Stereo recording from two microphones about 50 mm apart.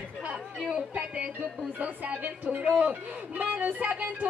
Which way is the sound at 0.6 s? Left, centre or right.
Centre.